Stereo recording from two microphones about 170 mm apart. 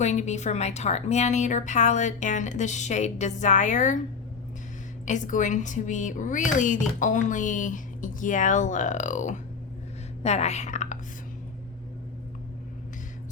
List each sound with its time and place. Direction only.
0.0 s speech: 45° left (ahead or behind)
5.0 s a woman's voice: 45° left (ahead or behind)